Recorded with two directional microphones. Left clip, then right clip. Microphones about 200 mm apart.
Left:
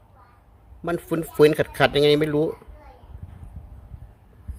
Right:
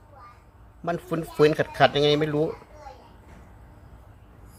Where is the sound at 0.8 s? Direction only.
40° left (ahead or behind).